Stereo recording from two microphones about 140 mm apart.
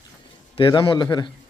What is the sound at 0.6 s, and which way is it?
Speech, 35° left (ahead or behind).